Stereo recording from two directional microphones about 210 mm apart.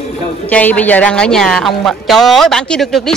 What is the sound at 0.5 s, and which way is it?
A woman's voice, 5° left (ahead or behind).